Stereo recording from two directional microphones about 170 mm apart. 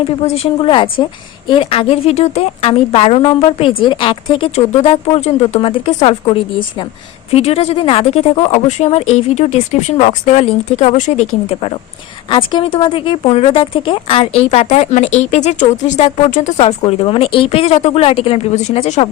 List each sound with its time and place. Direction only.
0.3 s speech: 35° left (ahead or behind)
12.3 s speech: 25° left (ahead or behind)